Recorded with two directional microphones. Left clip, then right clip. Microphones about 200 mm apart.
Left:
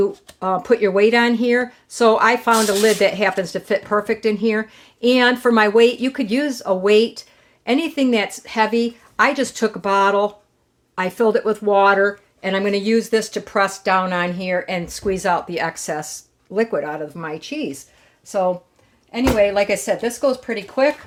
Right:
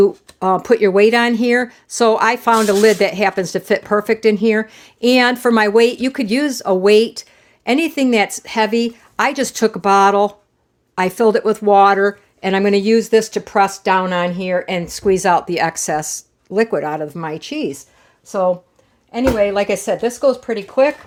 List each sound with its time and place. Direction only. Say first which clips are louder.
0.0 s speech: right 6 dB; 40° right (ahead or behind)
18.3 s speech: right 3 dB; 25° right (ahead or behind)